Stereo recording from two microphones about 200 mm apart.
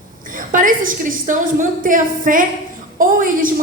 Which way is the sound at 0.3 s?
45° right (ahead or behind).